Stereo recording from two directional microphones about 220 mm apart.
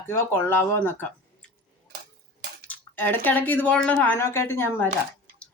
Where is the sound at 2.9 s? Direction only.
10° left (ahead or behind).